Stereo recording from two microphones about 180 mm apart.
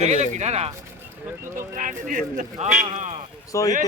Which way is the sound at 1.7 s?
45° right (ahead or behind).